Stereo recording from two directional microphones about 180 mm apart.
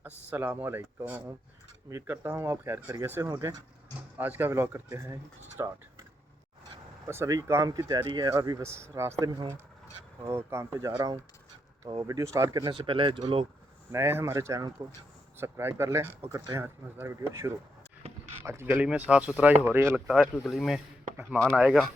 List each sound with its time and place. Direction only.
0.3 s speech: 10° right (ahead or behind)
7.1 s speech: 15° right (ahead or behind)
13.9 s speech: 15° right (ahead or behind)
20.3 s speech: centre (ahead or behind)